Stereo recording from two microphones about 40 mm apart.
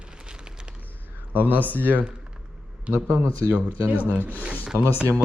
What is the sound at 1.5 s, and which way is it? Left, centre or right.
Speech, left.